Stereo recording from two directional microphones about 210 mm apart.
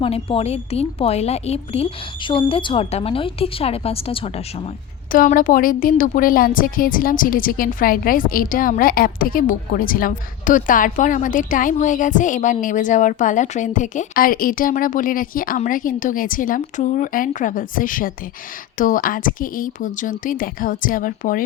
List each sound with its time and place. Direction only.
0.0 s a woman's voice: 25° left (ahead or behind)
5.1 s a woman's voice: 40° left (ahead or behind)